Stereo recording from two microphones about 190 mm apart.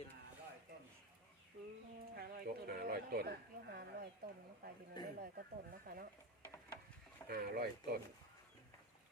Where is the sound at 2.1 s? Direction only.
50° right (ahead or behind).